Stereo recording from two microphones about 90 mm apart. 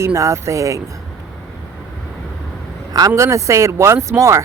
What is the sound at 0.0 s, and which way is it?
Speech, 35° right (ahead or behind).